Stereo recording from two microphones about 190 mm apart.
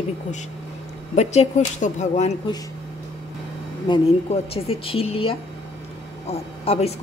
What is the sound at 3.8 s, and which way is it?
A woman's voice, 30° left (ahead or behind).